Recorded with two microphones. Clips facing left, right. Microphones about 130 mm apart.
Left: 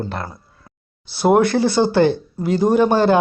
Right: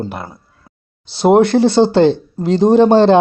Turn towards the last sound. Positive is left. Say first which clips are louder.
# right 6 dB
turn(degrees=-25)  # may be behind; listen again after turning